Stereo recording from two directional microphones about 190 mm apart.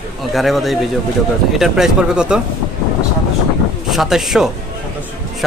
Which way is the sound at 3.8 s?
Centre (ahead or behind).